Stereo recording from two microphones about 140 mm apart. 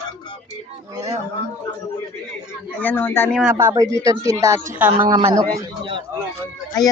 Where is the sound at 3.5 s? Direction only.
20° right (ahead or behind).